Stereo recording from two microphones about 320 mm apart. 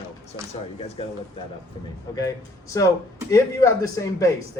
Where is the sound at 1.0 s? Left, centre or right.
Centre.